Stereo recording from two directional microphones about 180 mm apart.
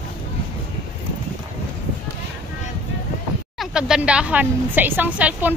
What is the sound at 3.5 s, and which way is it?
A woman's voice, 5° right (ahead or behind).